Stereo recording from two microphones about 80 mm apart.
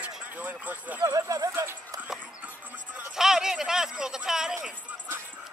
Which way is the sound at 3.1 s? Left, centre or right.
Centre.